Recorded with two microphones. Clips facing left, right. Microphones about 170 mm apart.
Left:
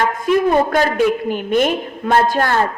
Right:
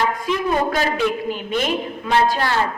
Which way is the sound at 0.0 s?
50° left (ahead or behind).